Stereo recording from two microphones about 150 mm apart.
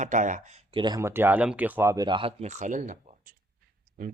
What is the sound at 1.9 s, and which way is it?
Speech, 30° right (ahead or behind).